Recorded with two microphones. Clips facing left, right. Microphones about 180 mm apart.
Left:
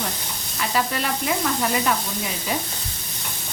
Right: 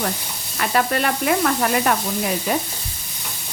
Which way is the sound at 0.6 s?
60° right (ahead or behind).